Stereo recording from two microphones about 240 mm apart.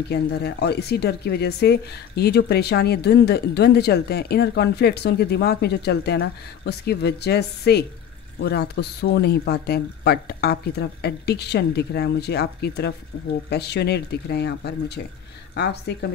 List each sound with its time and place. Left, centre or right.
0.1 s speech: left